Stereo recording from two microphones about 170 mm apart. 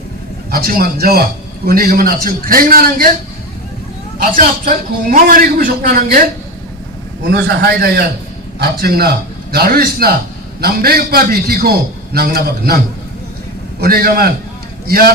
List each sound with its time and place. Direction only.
0.5 s a man's voice: 60° right (ahead or behind)
4.2 s a man's voice: 55° right (ahead or behind)
7.3 s a man's voice: 65° right (ahead or behind)
13.8 s a man's voice: 60° right (ahead or behind)